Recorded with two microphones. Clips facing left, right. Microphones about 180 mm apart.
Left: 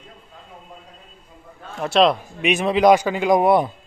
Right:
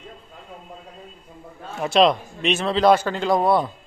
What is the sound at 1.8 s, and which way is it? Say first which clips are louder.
Speech: even; centre (ahead or behind).